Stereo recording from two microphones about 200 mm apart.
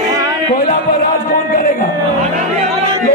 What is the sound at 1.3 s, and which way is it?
Music, 40° left (ahead or behind).